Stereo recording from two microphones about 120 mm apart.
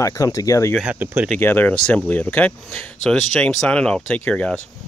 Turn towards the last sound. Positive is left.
turn(degrees=10)  # may be behind; listen again after turning